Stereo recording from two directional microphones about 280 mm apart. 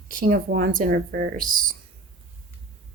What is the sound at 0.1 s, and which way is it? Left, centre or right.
Speech, right.